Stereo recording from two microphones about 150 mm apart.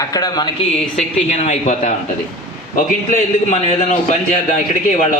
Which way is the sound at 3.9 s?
55° left (ahead or behind).